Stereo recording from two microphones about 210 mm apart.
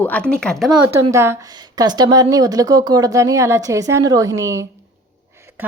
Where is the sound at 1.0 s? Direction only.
15° right (ahead or behind).